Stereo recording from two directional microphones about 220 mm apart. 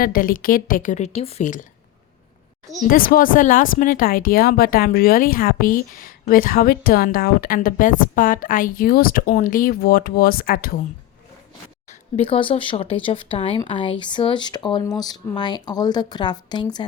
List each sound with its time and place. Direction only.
0.0 s speech: 40° left (ahead or behind)
2.8 s speech: 40° left (ahead or behind)
11.9 s speech: 30° left (ahead or behind)